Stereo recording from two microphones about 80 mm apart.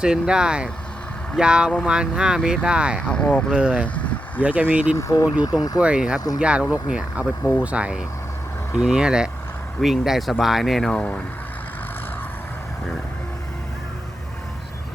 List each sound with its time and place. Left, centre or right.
0.0 s speech: centre
3.1 s speech: centre
3.5 s speech: centre
4.9 s speech: left
5.5 s speech: left
5.8 s speech: centre
10.9 s speech: centre